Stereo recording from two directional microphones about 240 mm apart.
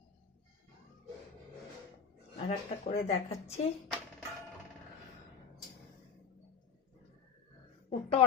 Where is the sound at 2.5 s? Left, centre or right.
Left.